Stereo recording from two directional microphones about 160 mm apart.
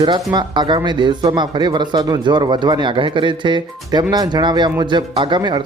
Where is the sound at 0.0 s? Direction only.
25° right (ahead or behind).